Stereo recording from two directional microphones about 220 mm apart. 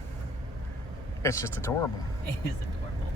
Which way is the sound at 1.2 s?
10° left (ahead or behind).